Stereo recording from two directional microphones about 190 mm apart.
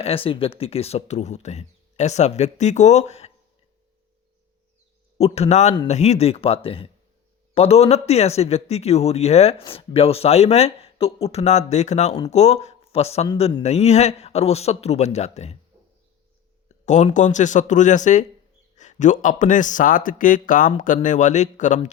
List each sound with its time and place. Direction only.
0.0 s speech: 30° left (ahead or behind)
5.1 s speech: 35° left (ahead or behind)
16.8 s speech: 40° left (ahead or behind)